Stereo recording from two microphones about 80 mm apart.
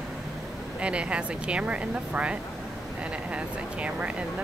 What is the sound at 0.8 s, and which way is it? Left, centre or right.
Speech, centre.